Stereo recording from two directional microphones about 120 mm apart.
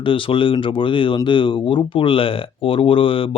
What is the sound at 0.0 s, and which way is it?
Speech, 45° left (ahead or behind).